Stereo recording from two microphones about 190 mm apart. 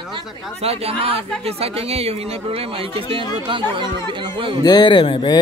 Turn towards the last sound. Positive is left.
turn(degrees=25)  # may be behind; listen again after turning